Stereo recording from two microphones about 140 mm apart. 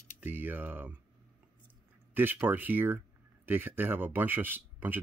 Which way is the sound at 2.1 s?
15° right (ahead or behind).